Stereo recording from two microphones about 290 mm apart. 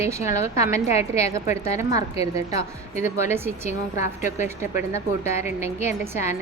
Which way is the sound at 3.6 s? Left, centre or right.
Left.